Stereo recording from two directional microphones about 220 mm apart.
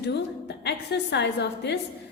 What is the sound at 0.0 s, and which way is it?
A woman's voice, 50° left (ahead or behind).